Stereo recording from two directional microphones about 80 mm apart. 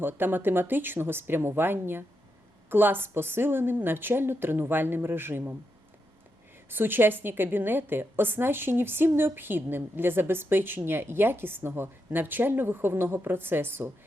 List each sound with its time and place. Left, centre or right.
0.0 s a woman's voice: right
6.7 s a woman's voice: right